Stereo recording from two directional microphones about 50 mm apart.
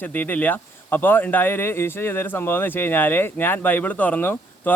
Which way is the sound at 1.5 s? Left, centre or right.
Left.